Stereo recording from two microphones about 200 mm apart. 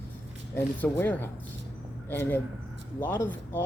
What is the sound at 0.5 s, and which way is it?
Speech, 10° left (ahead or behind).